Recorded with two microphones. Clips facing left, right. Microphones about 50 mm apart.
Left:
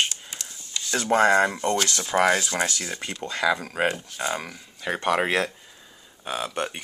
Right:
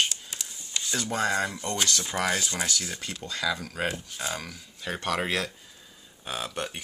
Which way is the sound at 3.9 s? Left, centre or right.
Centre.